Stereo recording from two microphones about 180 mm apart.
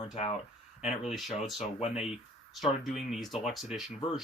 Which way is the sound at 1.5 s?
Centre (ahead or behind).